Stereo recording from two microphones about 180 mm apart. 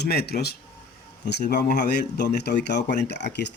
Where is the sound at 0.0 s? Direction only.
60° left (ahead or behind).